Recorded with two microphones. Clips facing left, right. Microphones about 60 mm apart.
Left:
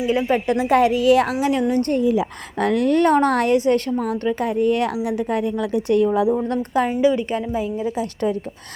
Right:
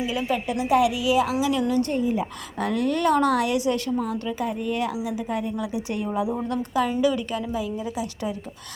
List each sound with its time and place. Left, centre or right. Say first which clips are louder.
0.1 s a woman's voice: left 6 dB; left
0.4 s a woman's voice: left 2 dB; left
0.8 s speech: left 6 dB; left
2.0 s speech: left 6 dB; left
2.6 s a woman's voice: left 7 dB; left
6.5 s a woman's voice: left 4 dB; left
7.0 s a woman's voice: left 5 dB; left